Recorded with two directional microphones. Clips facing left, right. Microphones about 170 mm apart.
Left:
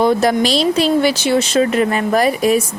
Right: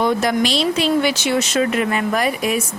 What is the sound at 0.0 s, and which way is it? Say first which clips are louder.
Speech: left 4 dB; 35° left (ahead or behind).